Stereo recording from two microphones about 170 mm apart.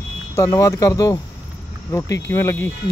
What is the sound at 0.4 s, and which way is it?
Speech, 15° left (ahead or behind).